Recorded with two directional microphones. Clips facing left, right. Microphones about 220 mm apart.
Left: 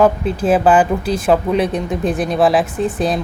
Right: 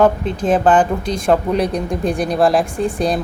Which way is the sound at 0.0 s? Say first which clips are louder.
Left 1 dB; 5° left (ahead or behind).